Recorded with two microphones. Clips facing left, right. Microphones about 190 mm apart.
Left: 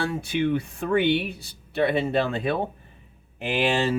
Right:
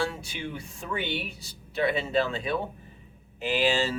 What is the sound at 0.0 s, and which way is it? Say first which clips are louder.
Speech: left 7 dB; 60° left (ahead or behind).